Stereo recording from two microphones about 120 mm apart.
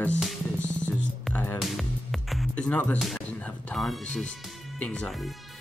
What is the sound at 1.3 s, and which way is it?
Speech, 20° left (ahead or behind).